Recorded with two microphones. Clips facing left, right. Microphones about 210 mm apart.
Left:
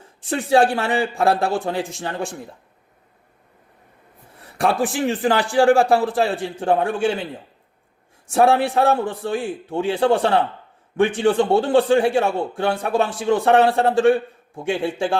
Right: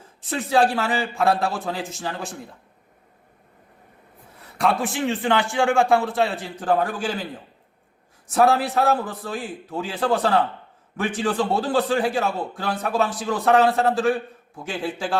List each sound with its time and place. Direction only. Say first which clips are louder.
0.2 s a man's voice: left 3 dB; 30° left (ahead or behind)
5.0 s a man's voice: even; 35° left (ahead or behind)
8.3 s a man's voice: left 2 dB; 30° left (ahead or behind)